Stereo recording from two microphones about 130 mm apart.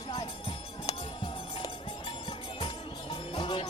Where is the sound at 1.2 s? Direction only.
40° left (ahead or behind).